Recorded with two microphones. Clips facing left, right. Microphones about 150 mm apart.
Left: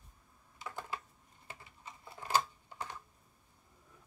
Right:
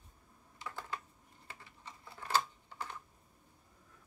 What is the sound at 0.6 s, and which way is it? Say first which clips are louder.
Computer keyboard: left 1 dB; 15° left (ahead or behind).